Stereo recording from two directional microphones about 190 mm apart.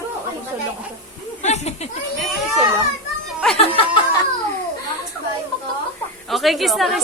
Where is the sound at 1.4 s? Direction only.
35° left (ahead or behind).